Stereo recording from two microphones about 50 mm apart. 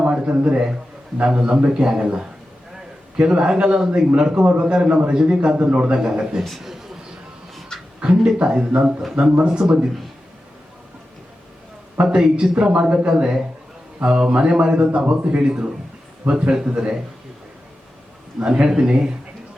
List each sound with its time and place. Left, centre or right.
0.0 s a sound: right
1.2 s a man's voice: right
3.2 s a man's voice: centre
6.6 s a sound: centre
8.0 s a man's voice: right
12.1 s a man's voice: centre
18.3 s a man's voice: centre